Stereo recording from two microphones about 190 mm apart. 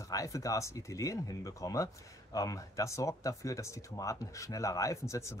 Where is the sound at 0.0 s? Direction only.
15° left (ahead or behind).